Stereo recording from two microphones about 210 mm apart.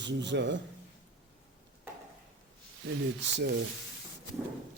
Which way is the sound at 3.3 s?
55° right (ahead or behind).